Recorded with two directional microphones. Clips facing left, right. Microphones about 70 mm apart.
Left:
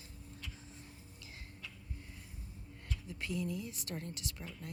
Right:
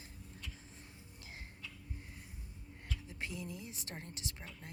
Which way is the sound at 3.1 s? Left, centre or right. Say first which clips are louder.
Left 7 dB; right.